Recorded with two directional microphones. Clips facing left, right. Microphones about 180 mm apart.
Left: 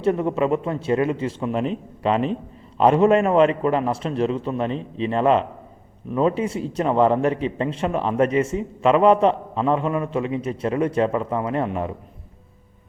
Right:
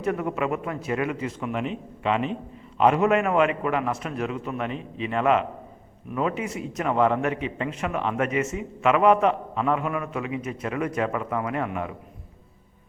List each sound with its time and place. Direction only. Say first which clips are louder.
0.0 s a man's voice: left 6 dB; 30° left (ahead or behind)